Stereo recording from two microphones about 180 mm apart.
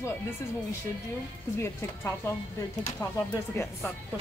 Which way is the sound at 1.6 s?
15° left (ahead or behind).